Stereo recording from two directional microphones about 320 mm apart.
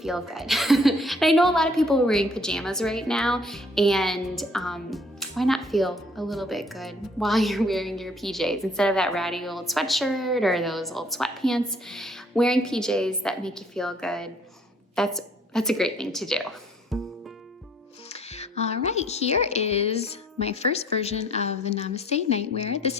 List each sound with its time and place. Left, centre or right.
0.0 s a woman's voice: centre
16.9 s music: centre
18.1 s speech: centre